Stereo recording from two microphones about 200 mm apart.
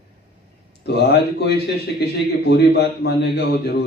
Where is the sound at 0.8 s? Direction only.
55° left (ahead or behind).